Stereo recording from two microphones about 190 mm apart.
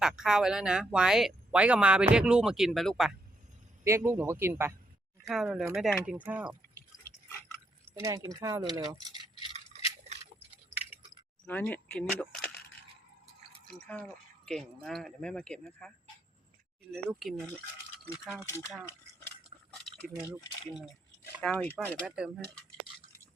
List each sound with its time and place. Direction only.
0.0 s speech: 5° right (ahead or behind)
3.8 s speech: 15° right (ahead or behind)
5.3 s speech: centre (ahead or behind)
7.9 s speech: 15° right (ahead or behind)
11.4 s speech: 10° left (ahead or behind)
14.4 s speech: centre (ahead or behind)
16.9 s speech: centre (ahead or behind)
18.4 s speech: 15° left (ahead or behind)
20.1 s speech: 10° right (ahead or behind)
21.4 s speech: 10° left (ahead or behind)
22.0 s speech: 5° right (ahead or behind)